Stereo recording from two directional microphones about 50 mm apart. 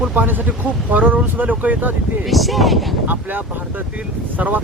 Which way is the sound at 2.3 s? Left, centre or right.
Centre.